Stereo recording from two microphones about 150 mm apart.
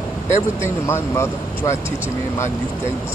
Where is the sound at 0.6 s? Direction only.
20° left (ahead or behind).